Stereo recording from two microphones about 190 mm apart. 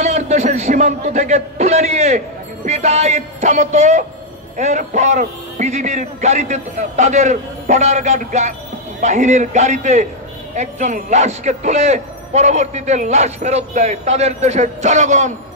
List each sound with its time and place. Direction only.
0.0 s a man's voice: 35° right (ahead or behind)